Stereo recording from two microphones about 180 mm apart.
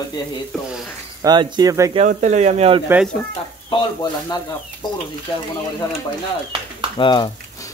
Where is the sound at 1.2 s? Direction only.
25° right (ahead or behind).